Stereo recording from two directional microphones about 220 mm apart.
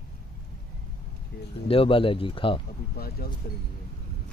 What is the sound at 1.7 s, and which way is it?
Speech, 25° left (ahead or behind).